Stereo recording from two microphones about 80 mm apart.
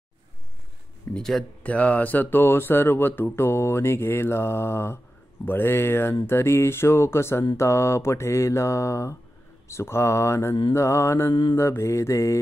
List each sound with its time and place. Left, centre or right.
1.1 s speech: centre
1.6 s speech: centre
6.2 s mantra: left